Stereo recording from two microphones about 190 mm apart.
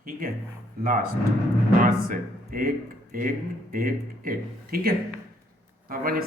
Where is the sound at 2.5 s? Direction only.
50° right (ahead or behind).